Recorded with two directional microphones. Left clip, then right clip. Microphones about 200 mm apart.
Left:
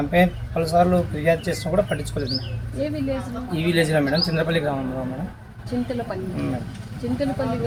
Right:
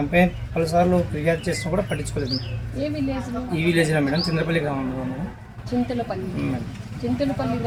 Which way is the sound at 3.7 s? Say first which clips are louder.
Left 2 dB; 25° right (ahead or behind).